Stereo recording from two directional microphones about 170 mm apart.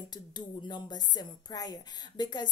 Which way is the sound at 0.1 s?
25° left (ahead or behind).